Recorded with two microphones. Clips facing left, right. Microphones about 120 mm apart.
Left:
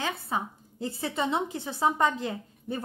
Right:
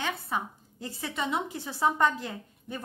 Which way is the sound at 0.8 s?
30° left (ahead or behind).